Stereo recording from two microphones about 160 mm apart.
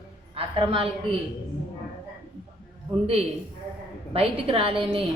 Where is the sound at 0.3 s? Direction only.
35° right (ahead or behind).